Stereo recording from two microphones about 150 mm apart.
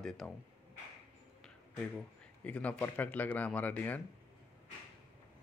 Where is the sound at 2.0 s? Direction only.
10° left (ahead or behind).